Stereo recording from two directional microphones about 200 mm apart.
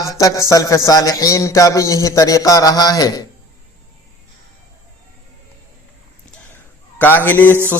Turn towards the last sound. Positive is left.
turn(degrees=10)  # may be behind; listen again after turning